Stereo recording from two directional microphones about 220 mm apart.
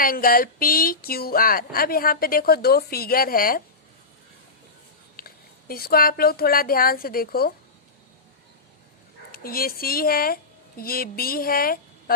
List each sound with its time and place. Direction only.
0.0 s speech: 40° left (ahead or behind)
5.1 s speech: 40° left (ahead or behind)
9.4 s speech: 40° left (ahead or behind)